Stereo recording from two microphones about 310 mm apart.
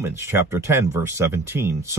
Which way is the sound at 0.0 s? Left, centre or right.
Centre.